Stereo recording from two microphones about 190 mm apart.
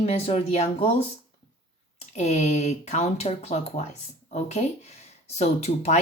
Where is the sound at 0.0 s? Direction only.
35° left (ahead or behind).